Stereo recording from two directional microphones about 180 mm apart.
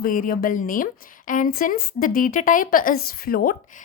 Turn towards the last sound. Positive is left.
turn(degrees=55)  # may be behind; listen again after turning